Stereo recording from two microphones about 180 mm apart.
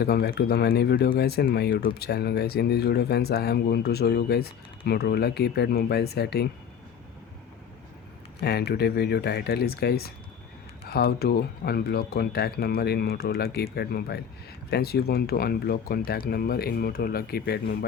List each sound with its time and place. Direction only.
0.0 s speech: 60° left (ahead or behind)
8.4 s speech: 65° left (ahead or behind)